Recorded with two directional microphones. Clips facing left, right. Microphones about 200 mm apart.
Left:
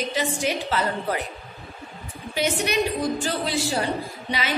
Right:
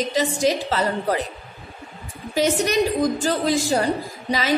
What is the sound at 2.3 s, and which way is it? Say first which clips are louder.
A woman's voice: right 4 dB; 40° right (ahead or behind).